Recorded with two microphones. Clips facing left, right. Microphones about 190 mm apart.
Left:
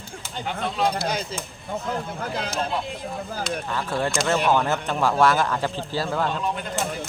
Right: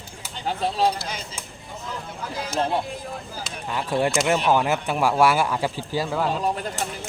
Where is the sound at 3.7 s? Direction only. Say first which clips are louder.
Right 5 dB; 15° right (ahead or behind).